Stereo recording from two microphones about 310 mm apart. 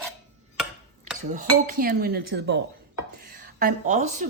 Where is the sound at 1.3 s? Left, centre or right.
Right.